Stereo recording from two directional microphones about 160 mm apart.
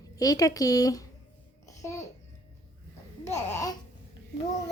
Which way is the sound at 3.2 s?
20° left (ahead or behind).